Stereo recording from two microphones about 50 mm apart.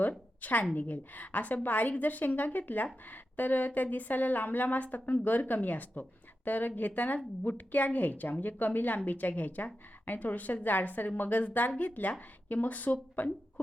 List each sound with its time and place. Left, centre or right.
0.4 s a woman's voice: left